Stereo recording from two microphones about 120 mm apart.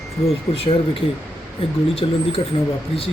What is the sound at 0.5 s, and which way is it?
Speech, 55° left (ahead or behind).